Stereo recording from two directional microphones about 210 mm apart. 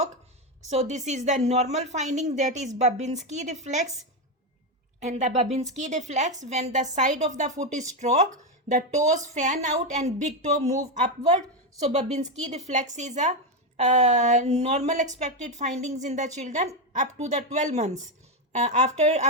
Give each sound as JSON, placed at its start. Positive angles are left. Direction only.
{"t": 0.7, "sound": "a woman's voice", "side_deg": -35}
{"t": 4.9, "sound": "a woman's voice", "side_deg": -35}